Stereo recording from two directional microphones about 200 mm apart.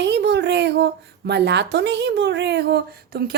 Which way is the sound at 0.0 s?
60° right (ahead or behind).